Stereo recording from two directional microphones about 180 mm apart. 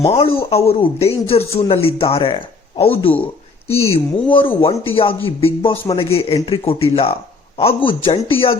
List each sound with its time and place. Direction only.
0.0 s speech: 30° left (ahead or behind)